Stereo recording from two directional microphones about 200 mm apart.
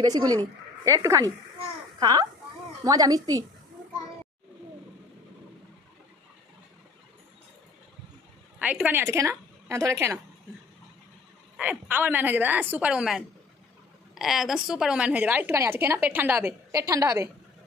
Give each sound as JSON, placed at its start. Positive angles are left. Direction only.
{"t": 0.0, "sound": "a woman's voice", "side_deg": -20}
{"t": 8.5, "sound": "a woman's voice", "side_deg": -5}
{"t": 11.5, "sound": "a woman's voice", "side_deg": -5}